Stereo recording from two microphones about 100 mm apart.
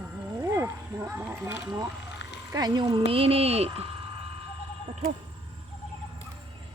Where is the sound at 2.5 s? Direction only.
45° right (ahead or behind).